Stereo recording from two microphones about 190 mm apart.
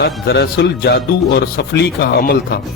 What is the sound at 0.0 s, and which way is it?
A man's voice, 60° left (ahead or behind).